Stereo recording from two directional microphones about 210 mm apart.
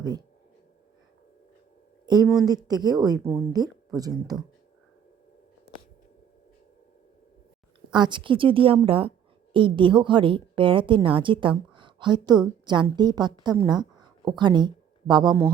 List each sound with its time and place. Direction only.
0.0 s speech: 20° right (ahead or behind)
2.0 s speech: 20° right (ahead or behind)
7.9 s a woman's voice: 20° right (ahead or behind)